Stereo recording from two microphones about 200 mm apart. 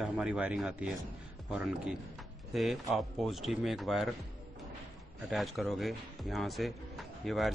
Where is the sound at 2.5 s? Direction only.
Centre (ahead or behind).